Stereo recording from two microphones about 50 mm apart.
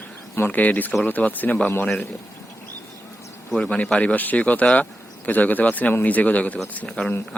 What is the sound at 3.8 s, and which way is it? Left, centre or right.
Speech, left.